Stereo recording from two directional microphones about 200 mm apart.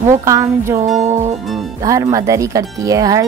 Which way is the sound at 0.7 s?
35° right (ahead or behind).